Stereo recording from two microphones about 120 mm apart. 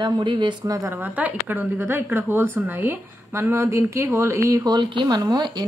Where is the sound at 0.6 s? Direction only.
25° right (ahead or behind).